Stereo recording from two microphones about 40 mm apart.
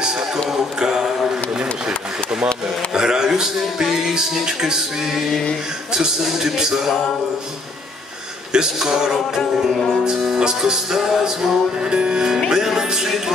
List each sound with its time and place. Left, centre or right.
0.7 s music: centre
2.4 s speech: centre
5.9 s speech: centre
8.5 s speech: centre
11.0 s music: centre
11.9 s speech: right